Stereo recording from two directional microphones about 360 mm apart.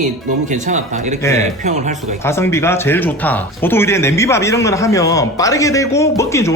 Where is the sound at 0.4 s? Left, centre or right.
Centre.